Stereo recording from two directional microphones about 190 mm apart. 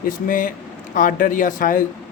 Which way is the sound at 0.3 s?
45° left (ahead or behind).